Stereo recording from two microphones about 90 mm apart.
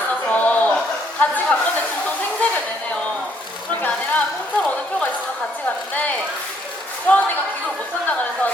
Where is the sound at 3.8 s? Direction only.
15° left (ahead or behind).